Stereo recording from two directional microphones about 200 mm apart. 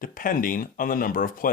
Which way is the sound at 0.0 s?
45° left (ahead or behind).